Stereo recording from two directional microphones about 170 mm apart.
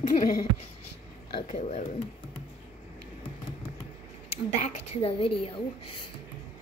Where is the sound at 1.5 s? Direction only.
40° left (ahead or behind).